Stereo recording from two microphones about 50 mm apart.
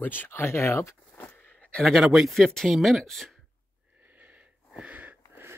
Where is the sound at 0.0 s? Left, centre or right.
Left.